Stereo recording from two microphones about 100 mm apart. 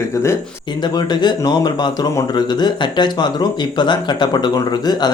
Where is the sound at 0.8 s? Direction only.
45° left (ahead or behind).